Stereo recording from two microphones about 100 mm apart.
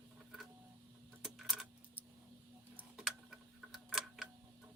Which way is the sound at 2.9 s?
5° right (ahead or behind).